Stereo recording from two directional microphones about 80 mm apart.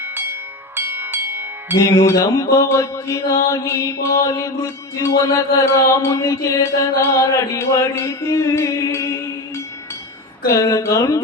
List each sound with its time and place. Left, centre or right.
0.0 s music: right
1.8 s a sound: left
10.4 s speech: left